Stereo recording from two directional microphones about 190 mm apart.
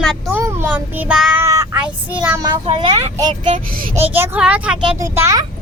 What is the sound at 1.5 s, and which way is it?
Child singing, 15° right (ahead or behind).